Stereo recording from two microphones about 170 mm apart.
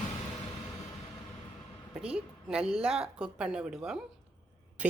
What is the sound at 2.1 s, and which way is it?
Speech, 5° right (ahead or behind).